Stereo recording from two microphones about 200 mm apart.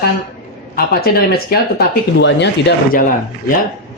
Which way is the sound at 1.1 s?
50° left (ahead or behind).